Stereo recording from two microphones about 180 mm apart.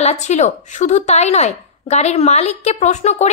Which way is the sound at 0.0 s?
40° left (ahead or behind).